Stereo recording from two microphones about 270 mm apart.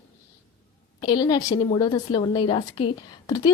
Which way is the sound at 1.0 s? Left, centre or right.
Centre.